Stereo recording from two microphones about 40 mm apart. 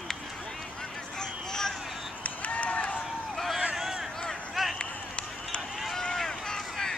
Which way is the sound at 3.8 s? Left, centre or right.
Centre.